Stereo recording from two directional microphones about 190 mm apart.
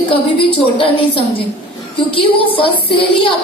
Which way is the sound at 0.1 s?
30° left (ahead or behind).